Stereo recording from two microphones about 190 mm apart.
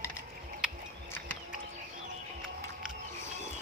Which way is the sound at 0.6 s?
5° right (ahead or behind).